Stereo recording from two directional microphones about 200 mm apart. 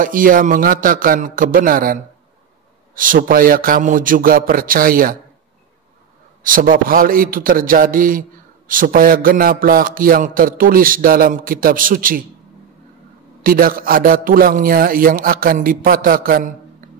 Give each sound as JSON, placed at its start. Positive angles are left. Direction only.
{"t": 0.0, "sound": "a man's voice", "side_deg": -45}
{"t": 6.4, "sound": "a man's voice", "side_deg": -45}
{"t": 13.4, "sound": "a man's voice", "side_deg": -45}